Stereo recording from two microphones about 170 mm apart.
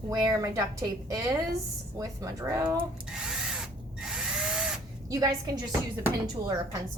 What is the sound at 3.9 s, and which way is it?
Drill, 5° right (ahead or behind).